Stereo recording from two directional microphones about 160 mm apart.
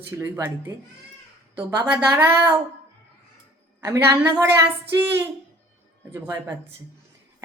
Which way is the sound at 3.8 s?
20° right (ahead or behind).